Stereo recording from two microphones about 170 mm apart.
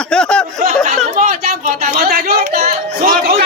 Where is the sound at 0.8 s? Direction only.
50° right (ahead or behind).